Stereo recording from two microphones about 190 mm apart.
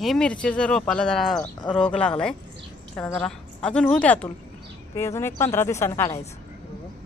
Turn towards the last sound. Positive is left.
turn(degrees=15)  # may be behind; listen again after turning